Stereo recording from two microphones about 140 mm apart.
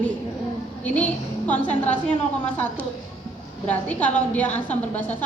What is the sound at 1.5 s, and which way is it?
Speech, 55° left (ahead or behind).